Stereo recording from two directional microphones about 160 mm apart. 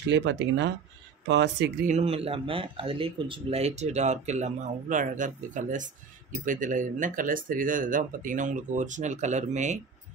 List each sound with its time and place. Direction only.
0.1 s speech: 90° right
1.9 s speech: 40° right (ahead or behind)